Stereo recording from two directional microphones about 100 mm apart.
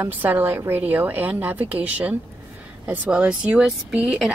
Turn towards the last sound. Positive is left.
turn(degrees=-5)  # may be behind; listen again after turning